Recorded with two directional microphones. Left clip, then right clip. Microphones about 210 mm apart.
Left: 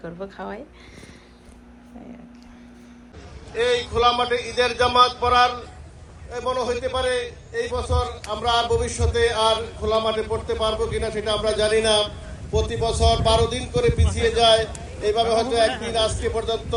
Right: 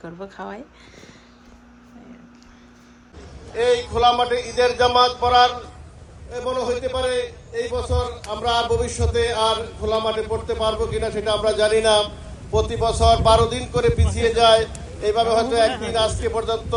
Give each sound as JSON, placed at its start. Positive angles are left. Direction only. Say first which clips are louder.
{"t": 0.0, "sound": "speech", "louder": "left 1 dB", "side_deg": -20}
{"t": 3.5, "sound": "a man's voice", "louder": "right 2 dB", "side_deg": -55}
{"t": 3.9, "sound": "mantra", "louder": "right 2 dB", "side_deg": -55}
{"t": 6.3, "sound": "a man's voice", "louder": "right 1 dB", "side_deg": 0}